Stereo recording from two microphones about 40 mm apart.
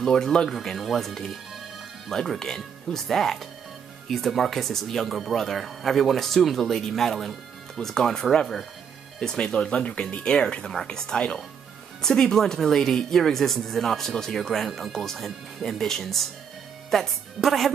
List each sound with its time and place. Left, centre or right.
0.0 s speech: centre
0.5 s speech: centre; by 11.3 s left
12.0 s speech: centre